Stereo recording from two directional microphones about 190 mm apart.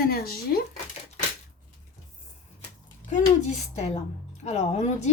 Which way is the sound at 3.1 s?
40° left (ahead or behind).